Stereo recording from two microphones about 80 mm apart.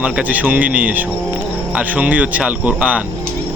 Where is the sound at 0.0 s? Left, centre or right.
Centre.